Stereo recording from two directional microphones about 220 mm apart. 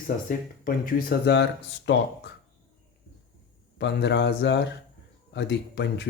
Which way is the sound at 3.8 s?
50° left (ahead or behind).